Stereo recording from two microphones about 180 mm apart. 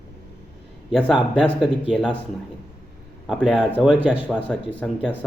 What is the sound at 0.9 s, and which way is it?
Speech, 5° left (ahead or behind).